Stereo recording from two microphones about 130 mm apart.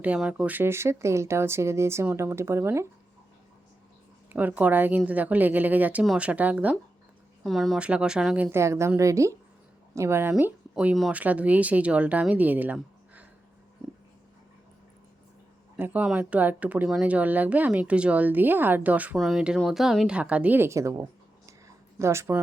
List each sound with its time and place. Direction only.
0.0 s speech: 10° right (ahead or behind)
4.3 s speech: 15° right (ahead or behind)
7.4 s speech: centre (ahead or behind)
15.8 s speech: 10° right (ahead or behind)
19.1 s speech: centre (ahead or behind); by 22.4 s 20° right (ahead or behind)